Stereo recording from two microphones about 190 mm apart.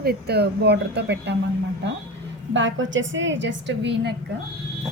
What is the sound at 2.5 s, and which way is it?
A woman's voice, 75° right (ahead or behind).